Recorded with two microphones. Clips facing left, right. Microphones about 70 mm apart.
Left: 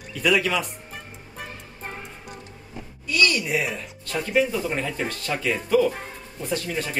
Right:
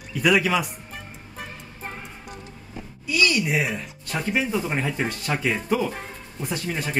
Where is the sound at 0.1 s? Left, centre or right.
Centre.